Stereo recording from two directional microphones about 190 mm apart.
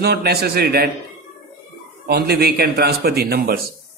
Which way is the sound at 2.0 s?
55° right (ahead or behind).